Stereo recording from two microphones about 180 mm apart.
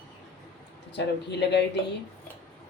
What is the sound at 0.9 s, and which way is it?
Speech, 70° left (ahead or behind).